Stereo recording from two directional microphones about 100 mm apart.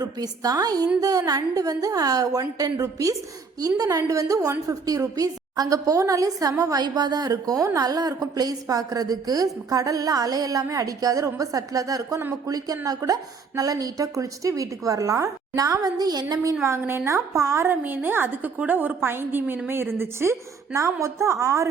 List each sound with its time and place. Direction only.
0.0 s a woman's voice: 40° right (ahead or behind)
16.6 s a woman's voice: 25° right (ahead or behind)